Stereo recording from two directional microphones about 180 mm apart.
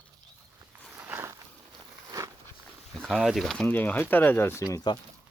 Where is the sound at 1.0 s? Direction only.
15° right (ahead or behind).